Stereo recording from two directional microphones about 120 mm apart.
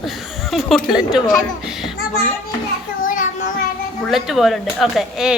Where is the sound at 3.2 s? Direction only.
90° left.